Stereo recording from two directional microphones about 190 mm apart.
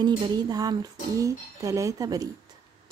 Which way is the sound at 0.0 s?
20° right (ahead or behind).